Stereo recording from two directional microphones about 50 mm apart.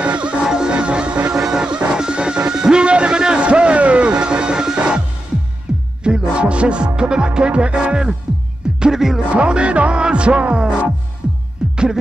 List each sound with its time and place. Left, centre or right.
0.0 s music: right
9.3 s music: right